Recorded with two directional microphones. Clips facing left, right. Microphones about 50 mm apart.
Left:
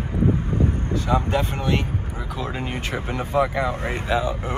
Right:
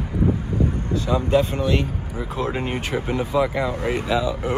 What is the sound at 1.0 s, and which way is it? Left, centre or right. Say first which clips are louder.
Speech: right 3 dB; left.